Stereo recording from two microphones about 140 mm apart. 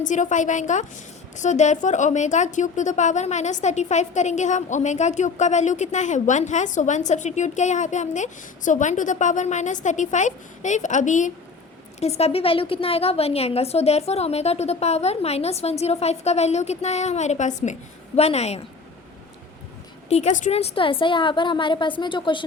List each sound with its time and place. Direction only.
0.0 s a woman's voice: 60° left (ahead or behind)
11.9 s a woman's voice: 50° left (ahead or behind)
18.2 s a woman's voice: 50° left (ahead or behind)
20.1 s a woman's voice: 55° left (ahead or behind); by 22.4 s 35° left (ahead or behind)